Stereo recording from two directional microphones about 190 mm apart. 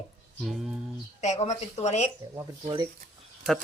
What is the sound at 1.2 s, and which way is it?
Speech, 35° left (ahead or behind).